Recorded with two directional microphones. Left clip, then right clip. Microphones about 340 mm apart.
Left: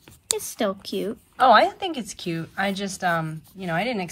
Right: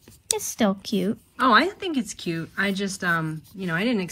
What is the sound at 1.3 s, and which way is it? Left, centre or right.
A woman's voice, centre.